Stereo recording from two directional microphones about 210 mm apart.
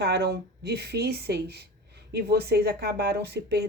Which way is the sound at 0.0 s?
55° right (ahead or behind).